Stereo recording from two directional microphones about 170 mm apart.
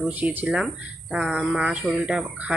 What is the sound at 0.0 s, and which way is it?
Speech, 10° right (ahead or behind).